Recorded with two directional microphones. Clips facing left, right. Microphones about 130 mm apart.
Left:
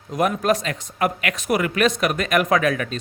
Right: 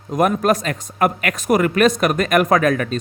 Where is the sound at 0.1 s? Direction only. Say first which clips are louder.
Right 3 dB; 45° right (ahead or behind).